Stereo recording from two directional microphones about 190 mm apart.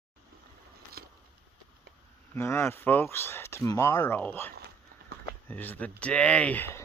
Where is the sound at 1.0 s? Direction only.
55° right (ahead or behind).